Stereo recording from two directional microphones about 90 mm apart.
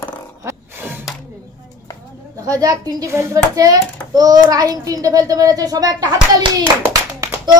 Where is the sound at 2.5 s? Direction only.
45° right (ahead or behind).